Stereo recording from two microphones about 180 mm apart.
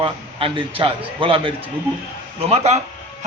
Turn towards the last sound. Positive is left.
turn(degrees=-35)  # may be behind; listen again after turning